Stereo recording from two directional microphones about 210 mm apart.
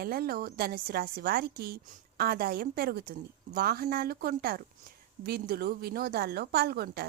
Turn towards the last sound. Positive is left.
turn(degrees=-50)  # may be behind; listen again after turning